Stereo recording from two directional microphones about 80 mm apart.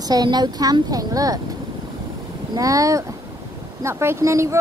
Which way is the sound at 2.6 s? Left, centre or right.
Right.